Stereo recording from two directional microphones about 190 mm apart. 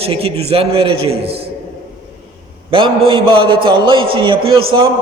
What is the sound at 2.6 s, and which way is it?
A man's voice, 25° right (ahead or behind).